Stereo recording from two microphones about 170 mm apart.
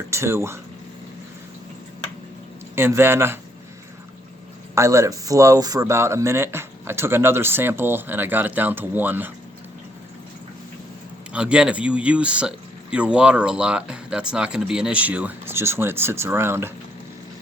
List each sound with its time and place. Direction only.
0.1 s speech: 15° right (ahead or behind)
2.7 s speech: 15° right (ahead or behind)
4.7 s speech: 15° right (ahead or behind)
11.3 s speech: 5° right (ahead or behind)